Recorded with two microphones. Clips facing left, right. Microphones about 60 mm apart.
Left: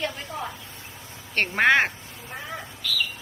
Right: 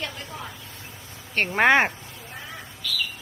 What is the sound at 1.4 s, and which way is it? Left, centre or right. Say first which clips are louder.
Speech: right 1 dB; centre.